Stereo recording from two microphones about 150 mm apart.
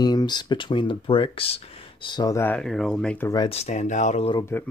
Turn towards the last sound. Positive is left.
turn(degrees=15)  # may be behind; listen again after turning